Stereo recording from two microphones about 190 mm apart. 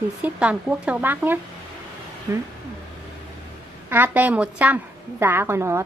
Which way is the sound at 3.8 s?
10° right (ahead or behind).